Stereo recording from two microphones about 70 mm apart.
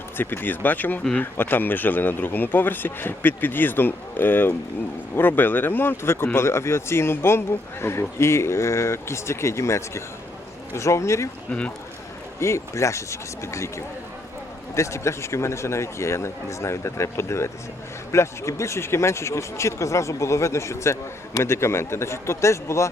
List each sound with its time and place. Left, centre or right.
0.2 s speech: left
12.4 s speech: left